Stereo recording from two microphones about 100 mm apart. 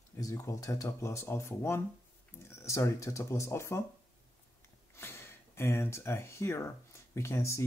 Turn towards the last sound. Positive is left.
turn(degrees=30)  # may be behind; listen again after turning